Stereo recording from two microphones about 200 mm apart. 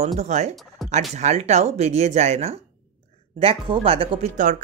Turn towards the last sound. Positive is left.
turn(degrees=-40)  # may be behind; listen again after turning